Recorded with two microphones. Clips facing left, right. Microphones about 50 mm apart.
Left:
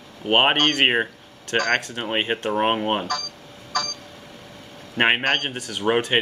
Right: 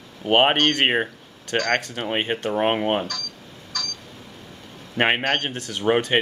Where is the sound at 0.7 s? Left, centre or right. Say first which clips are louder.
Left 1 dB; centre.